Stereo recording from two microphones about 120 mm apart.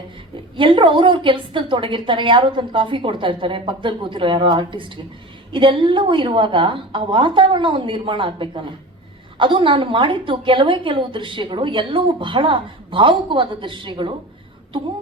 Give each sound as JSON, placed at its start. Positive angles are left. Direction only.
{"t": 0.5, "sound": "a woman's voice", "side_deg": -45}